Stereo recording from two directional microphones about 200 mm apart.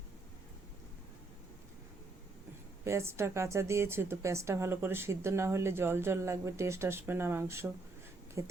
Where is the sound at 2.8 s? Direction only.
15° right (ahead or behind).